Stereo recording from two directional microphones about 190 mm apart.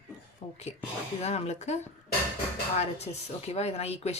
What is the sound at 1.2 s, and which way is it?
Speech, 35° left (ahead or behind).